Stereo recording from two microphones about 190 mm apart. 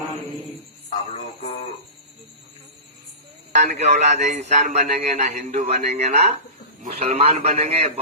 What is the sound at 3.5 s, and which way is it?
A man's voice, 40° right (ahead or behind).